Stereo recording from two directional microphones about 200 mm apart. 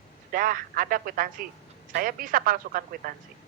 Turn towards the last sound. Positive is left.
turn(degrees=-45)  # may be behind; listen again after turning